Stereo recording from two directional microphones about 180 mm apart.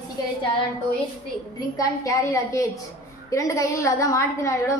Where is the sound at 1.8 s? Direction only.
15° left (ahead or behind).